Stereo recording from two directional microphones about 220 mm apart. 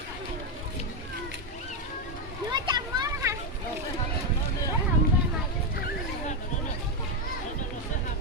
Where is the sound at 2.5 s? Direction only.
20° right (ahead or behind).